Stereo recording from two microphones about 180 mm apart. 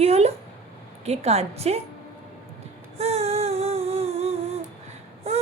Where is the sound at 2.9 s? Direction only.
35° right (ahead or behind).